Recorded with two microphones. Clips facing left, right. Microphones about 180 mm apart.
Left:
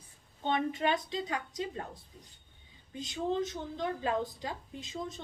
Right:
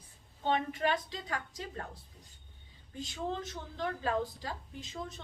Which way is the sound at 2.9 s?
20° left (ahead or behind).